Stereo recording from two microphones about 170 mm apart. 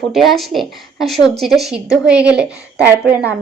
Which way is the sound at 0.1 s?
Centre (ahead or behind).